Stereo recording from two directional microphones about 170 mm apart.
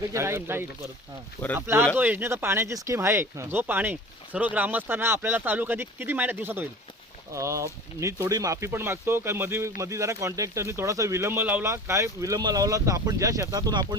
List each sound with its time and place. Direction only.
0.1 s speech: 15° right (ahead or behind)